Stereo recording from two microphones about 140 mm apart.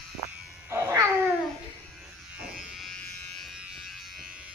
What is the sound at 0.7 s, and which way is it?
Cat, 20° right (ahead or behind).